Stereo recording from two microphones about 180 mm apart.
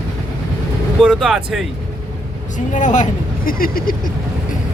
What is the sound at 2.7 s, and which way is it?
Speech, 45° left (ahead or behind).